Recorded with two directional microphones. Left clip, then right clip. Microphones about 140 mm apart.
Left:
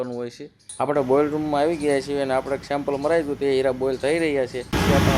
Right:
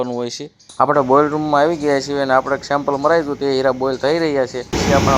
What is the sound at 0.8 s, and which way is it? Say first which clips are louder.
Speech: right 7 dB; 5° right (ahead or behind).